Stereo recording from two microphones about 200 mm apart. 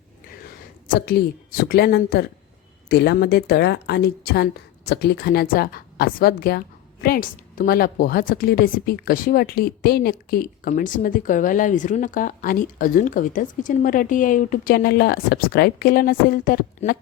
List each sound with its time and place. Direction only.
0.9 s a woman's voice: 50° left (ahead or behind)